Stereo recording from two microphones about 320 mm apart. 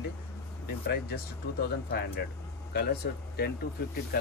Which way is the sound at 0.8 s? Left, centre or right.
Left.